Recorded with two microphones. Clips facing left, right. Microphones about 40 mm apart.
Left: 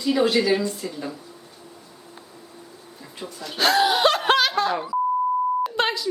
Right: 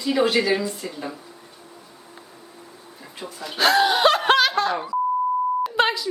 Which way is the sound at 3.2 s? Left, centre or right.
Centre.